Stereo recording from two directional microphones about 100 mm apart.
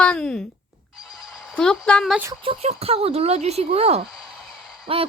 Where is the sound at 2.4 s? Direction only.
75° right (ahead or behind); by 4.0 s 90° right.